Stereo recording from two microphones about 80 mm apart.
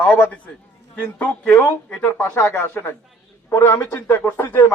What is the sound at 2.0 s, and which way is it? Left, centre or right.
A man's voice, centre.